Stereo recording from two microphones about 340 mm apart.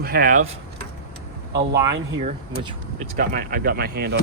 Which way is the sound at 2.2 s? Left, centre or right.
Centre.